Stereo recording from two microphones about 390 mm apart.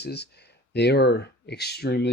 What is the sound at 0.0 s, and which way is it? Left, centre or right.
Speech, left.